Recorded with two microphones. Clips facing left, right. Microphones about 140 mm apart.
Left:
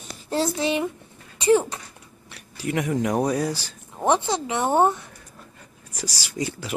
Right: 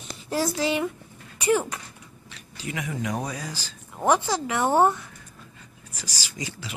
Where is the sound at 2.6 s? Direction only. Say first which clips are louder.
Left 7 dB; 55° left (ahead or behind).